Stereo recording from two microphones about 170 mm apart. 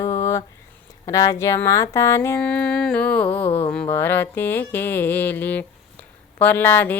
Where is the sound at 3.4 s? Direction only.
35° left (ahead or behind).